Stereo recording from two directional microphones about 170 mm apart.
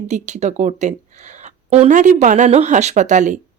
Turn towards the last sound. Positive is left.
turn(degrees=-45)  # may be behind; listen again after turning